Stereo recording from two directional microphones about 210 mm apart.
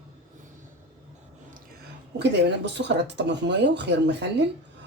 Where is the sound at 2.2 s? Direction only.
55° right (ahead or behind).